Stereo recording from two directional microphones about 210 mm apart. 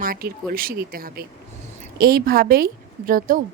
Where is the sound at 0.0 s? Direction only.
45° right (ahead or behind).